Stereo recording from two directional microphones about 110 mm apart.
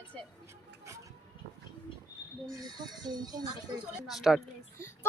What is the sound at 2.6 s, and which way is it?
Speech, 40° right (ahead or behind).